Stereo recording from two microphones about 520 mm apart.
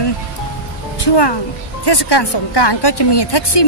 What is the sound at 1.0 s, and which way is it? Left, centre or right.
A woman's voice, left.